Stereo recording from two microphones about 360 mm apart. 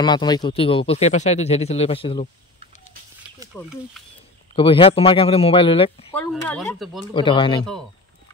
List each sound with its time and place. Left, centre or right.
0.0 s speech: centre
3.6 s speech: centre
4.6 s speech: centre
6.1 s speech: centre
7.2 s speech: centre